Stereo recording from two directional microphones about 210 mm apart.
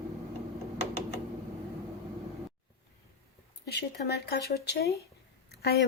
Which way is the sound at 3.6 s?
50° left (ahead or behind).